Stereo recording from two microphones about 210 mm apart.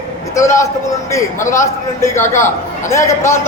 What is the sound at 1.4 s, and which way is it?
A man's voice, 35° left (ahead or behind).